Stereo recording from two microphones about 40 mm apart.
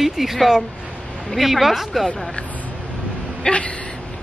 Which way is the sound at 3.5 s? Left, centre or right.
Left.